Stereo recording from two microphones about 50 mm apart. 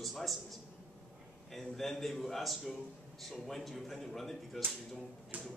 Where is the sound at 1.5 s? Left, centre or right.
Centre.